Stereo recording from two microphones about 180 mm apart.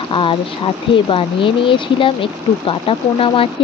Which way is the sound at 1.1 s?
30° left (ahead or behind).